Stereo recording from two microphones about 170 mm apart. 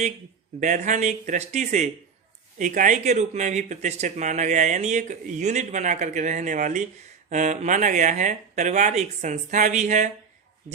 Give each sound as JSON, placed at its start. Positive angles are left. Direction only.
{"t": 0.6, "sound": "speech", "side_deg": -45}